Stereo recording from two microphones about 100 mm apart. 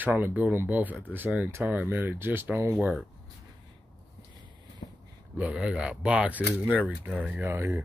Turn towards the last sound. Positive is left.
turn(degrees=-25)  # may be behind; listen again after turning